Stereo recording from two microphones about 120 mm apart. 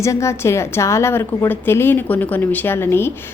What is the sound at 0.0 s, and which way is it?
Speech, 25° left (ahead or behind).